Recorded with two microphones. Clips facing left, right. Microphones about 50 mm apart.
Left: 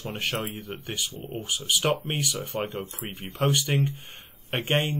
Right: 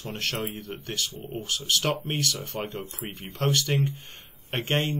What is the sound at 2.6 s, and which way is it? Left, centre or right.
Speech, centre.